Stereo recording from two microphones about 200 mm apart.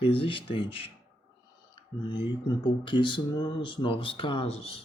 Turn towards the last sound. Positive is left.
turn(degrees=30)  # may be behind; listen again after turning